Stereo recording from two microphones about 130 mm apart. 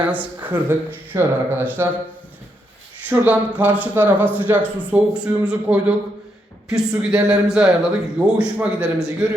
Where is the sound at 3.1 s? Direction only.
10° right (ahead or behind).